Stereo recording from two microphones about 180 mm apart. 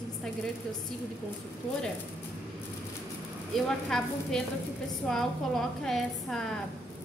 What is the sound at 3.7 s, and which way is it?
A woman's voice, 5° left (ahead or behind).